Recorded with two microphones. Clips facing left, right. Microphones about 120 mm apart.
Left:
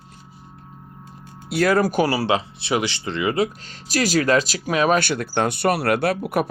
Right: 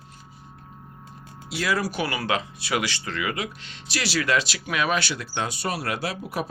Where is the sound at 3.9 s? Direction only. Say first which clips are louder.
Left 6 dB; 45° left (ahead or behind).